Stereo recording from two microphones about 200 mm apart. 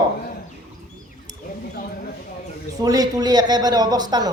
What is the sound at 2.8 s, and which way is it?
A man's voice, 20° right (ahead or behind).